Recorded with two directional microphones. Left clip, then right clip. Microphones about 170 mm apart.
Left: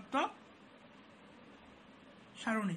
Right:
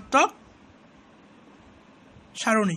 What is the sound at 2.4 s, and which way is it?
Speech, 55° right (ahead or behind).